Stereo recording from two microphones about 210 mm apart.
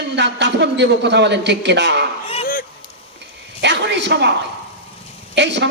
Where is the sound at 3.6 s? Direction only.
55° right (ahead or behind).